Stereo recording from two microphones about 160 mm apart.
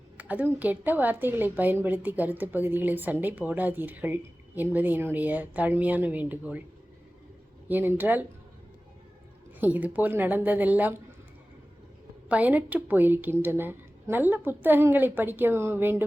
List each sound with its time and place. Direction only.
0.2 s a woman's voice: 10° right (ahead or behind)
7.7 s a woman's voice: 10° right (ahead or behind)
9.6 s a woman's voice: 10° right (ahead or behind)
12.3 s a woman's voice: 10° right (ahead or behind)